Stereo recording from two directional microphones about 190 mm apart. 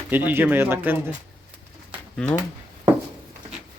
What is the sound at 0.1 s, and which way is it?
Speech, 10° right (ahead or behind).